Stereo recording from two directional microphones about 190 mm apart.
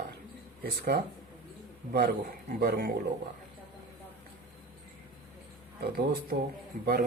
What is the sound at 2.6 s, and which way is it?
Speech, 55° right (ahead or behind).